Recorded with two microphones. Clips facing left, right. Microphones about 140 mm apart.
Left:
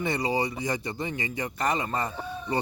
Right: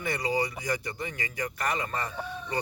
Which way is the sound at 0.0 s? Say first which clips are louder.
Left 2 dB; 25° left (ahead or behind).